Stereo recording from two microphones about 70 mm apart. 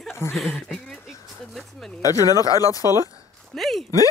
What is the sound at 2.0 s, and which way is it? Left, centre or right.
Speech, left.